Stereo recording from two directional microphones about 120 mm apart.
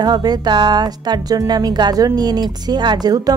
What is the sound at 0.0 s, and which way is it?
Speech, 35° right (ahead or behind).